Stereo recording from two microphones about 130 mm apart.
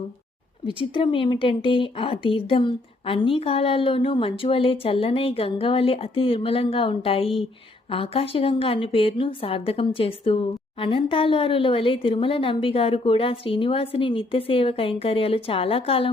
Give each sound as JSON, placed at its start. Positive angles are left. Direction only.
{"t": 0.9, "sound": "a woman's voice", "side_deg": 40}